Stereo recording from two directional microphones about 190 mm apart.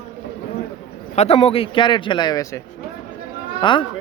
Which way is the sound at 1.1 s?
35° left (ahead or behind).